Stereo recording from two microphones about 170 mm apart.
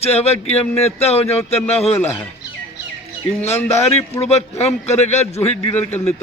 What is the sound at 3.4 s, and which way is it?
Speech, 10° left (ahead or behind).